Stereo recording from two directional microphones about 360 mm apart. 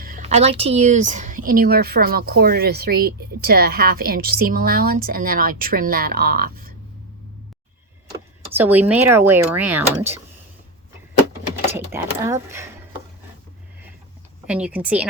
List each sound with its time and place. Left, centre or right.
0.0 s speech: right
8.1 s speech: centre
11.9 s speech: centre
14.4 s a woman's voice: centre